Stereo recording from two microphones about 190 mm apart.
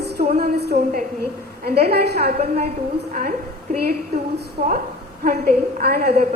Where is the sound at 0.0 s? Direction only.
60° right (ahead or behind).